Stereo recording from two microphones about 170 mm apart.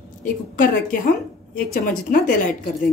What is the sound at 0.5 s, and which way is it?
Speech, 55° left (ahead or behind).